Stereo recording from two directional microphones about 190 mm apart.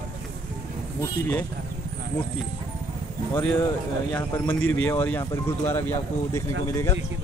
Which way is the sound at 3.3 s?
10° left (ahead or behind).